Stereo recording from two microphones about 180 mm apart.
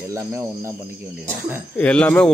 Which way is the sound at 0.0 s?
15° right (ahead or behind).